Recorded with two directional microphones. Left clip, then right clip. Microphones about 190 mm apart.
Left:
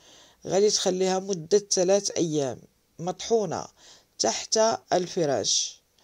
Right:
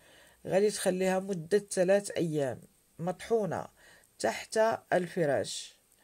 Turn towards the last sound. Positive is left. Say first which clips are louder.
# left 4 dB
turn(degrees=20)  # may be behind; listen again after turning